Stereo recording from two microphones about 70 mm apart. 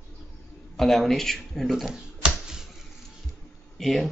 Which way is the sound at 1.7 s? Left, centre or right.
Centre.